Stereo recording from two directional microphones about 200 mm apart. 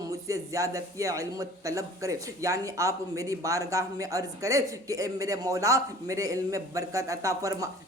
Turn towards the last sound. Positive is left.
turn(degrees=-15)  # may be behind; listen again after turning